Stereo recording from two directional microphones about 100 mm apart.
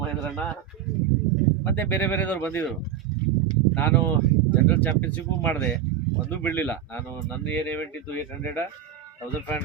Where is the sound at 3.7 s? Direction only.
15° left (ahead or behind).